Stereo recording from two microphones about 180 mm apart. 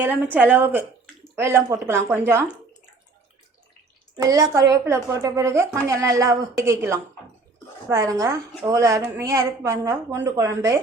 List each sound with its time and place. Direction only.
0.0 s a woman's voice: 10° right (ahead or behind)
4.2 s a woman's voice: 20° right (ahead or behind)